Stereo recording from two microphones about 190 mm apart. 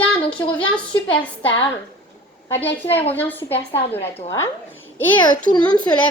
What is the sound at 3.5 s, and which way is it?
Speech, 30° left (ahead or behind).